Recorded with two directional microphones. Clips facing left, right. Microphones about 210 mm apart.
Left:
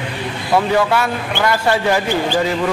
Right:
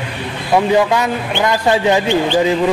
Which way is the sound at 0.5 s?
15° right (ahead or behind).